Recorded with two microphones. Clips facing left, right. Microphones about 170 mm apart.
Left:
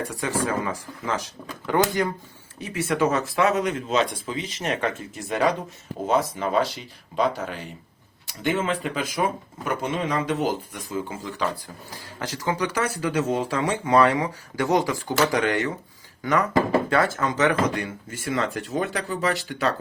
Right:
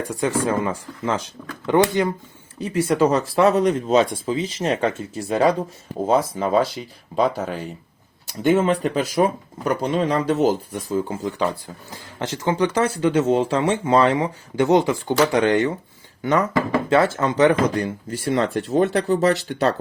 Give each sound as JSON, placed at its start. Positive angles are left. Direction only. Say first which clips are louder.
{"t": 0.1, "sound": "speech", "louder": "right 8 dB", "side_deg": -30}